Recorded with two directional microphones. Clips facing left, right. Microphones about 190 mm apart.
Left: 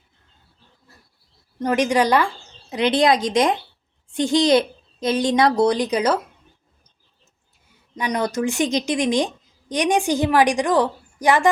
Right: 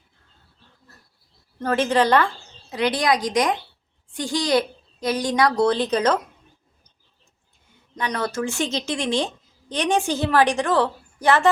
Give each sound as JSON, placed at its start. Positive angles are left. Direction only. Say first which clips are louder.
{"t": 1.5, "sound": "a woman's voice", "louder": "left 1 dB", "side_deg": 15}
{"t": 7.9, "sound": "a woman's voice", "louder": "left 3 dB", "side_deg": 15}